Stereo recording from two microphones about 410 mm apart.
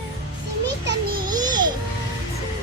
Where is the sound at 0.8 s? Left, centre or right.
Right.